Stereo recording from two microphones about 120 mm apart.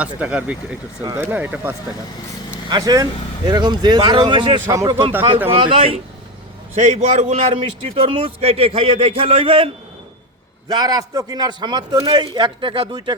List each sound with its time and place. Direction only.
0.0 s speech: 10° right (ahead or behind)
2.6 s a man's voice: 35° right (ahead or behind)
4.6 s speech: 25° right (ahead or behind)
5.5 s speech: 55° right (ahead or behind)
6.7 s a man's voice: 70° right (ahead or behind)
7.5 s speech: 45° right (ahead or behind)
10.7 s a man's voice: 35° right (ahead or behind)